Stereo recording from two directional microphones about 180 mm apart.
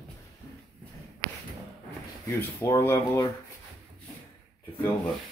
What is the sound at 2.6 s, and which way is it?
Speech, 15° left (ahead or behind).